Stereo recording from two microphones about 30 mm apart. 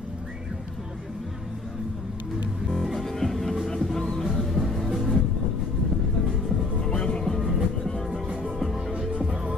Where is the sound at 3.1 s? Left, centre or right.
Centre.